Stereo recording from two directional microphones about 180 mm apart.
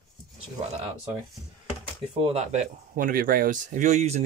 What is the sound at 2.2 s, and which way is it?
Speech, 35° right (ahead or behind).